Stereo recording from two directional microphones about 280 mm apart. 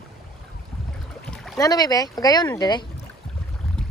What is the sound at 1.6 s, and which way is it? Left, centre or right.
Speech, centre.